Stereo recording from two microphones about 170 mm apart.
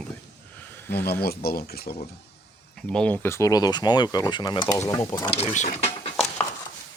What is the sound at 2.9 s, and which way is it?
Speech, 5° left (ahead or behind).